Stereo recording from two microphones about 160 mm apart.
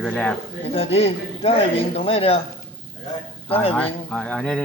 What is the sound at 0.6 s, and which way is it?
Speech, 40° left (ahead or behind).